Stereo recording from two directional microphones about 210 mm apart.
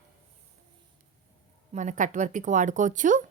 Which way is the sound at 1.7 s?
35° right (ahead or behind).